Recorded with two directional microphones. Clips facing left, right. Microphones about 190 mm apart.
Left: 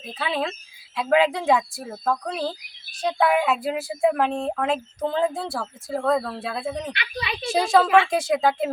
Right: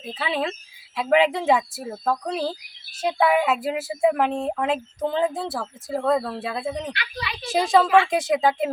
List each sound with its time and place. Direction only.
0.1 s speech: 5° right (ahead or behind)
6.9 s a woman's voice: 20° left (ahead or behind)
7.5 s speech: centre (ahead or behind)